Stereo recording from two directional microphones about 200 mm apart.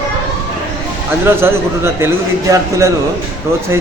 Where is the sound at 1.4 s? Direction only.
10° right (ahead or behind).